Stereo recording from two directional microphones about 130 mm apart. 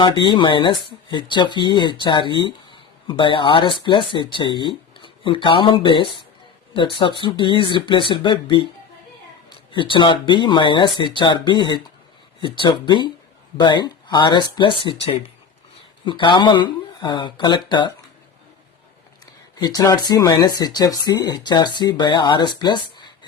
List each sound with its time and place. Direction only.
0.0 s speech: 40° left (ahead or behind)
9.7 s speech: 40° left (ahead or behind)
16.0 s speech: 40° left (ahead or behind)
19.5 s speech: 30° left (ahead or behind)